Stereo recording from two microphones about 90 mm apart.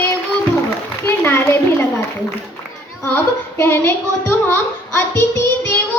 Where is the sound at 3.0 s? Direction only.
25° left (ahead or behind).